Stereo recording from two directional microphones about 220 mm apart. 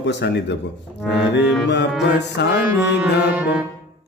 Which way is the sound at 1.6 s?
50° left (ahead or behind).